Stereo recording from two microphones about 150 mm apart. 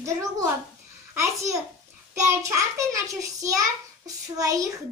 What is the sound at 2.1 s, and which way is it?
Speech, 20° right (ahead or behind).